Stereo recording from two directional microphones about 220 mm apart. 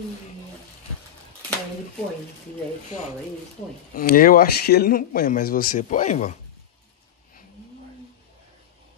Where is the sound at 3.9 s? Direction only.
40° left (ahead or behind).